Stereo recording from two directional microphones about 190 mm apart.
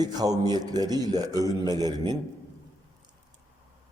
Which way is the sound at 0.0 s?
20° right (ahead or behind).